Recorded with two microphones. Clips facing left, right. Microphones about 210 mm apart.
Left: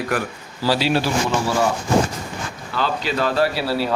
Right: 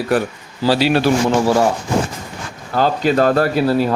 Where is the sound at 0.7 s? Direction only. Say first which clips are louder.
Right 5 dB; 55° right (ahead or behind).